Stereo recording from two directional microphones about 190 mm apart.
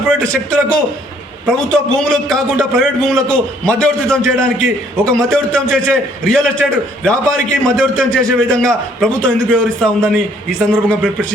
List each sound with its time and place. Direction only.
0.1 s a man's voice: 5° left (ahead or behind)